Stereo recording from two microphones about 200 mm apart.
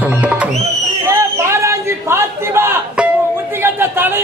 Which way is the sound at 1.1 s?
15° right (ahead or behind).